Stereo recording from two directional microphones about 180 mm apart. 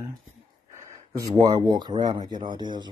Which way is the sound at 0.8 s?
20° right (ahead or behind).